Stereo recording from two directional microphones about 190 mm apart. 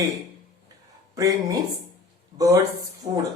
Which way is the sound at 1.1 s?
20° right (ahead or behind).